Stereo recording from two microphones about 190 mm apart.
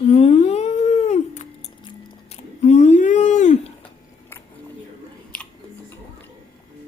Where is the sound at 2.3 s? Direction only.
35° left (ahead or behind).